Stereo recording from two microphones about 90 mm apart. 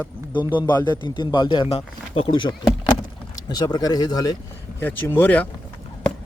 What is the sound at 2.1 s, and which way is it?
Speech, 80° left.